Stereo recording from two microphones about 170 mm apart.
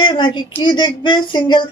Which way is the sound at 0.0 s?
25° left (ahead or behind).